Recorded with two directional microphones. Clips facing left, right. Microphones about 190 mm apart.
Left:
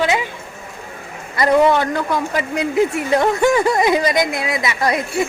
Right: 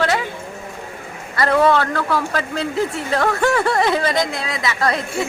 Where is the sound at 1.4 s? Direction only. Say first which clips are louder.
Left 2 dB; 15° left (ahead or behind).